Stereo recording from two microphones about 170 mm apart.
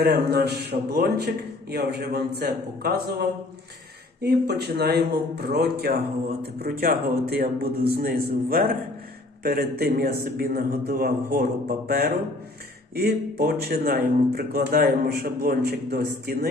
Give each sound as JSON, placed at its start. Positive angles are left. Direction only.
{"t": 0.0, "sound": "a man's voice", "side_deg": -70}